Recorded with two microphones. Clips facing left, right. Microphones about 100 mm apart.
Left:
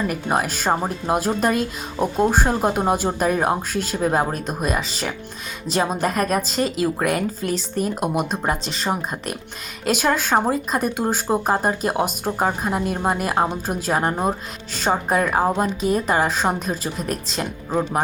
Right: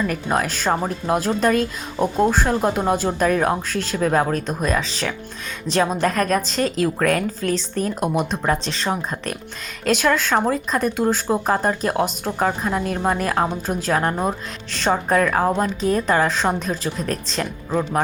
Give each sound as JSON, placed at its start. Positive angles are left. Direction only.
{"t": 0.1, "sound": "speech", "side_deg": 15}
{"t": 2.0, "sound": "speech", "side_deg": 5}
{"t": 2.3, "sound": "a woman's voice", "side_deg": 15}